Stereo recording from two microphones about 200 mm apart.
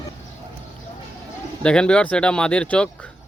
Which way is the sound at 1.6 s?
5° left (ahead or behind).